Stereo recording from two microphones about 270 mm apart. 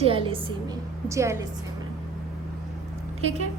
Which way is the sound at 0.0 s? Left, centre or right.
Centre.